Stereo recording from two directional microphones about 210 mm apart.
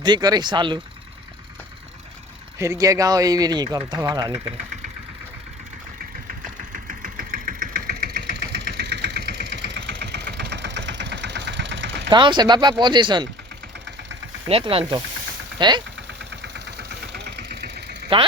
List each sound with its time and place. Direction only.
0.0 s speech: 20° right (ahead or behind)
2.6 s speech: 15° right (ahead or behind)
6.7 s engine: 40° right (ahead or behind); by 12.1 s 60° right (ahead or behind)
12.1 s speech: 20° right (ahead or behind)
14.4 s speech: 25° right (ahead or behind)
16.3 s engine: 55° right (ahead or behind)